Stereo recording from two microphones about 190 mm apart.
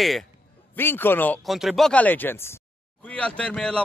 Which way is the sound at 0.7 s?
10° left (ahead or behind).